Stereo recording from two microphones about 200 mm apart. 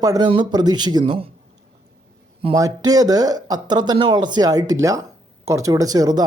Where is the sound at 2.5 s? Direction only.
20° right (ahead or behind).